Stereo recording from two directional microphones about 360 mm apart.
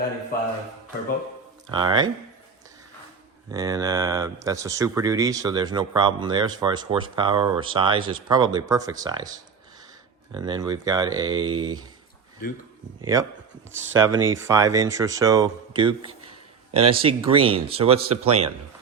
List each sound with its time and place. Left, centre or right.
1.7 s speech: centre
3.5 s speech: centre
10.3 s speech: centre
13.0 s speech: centre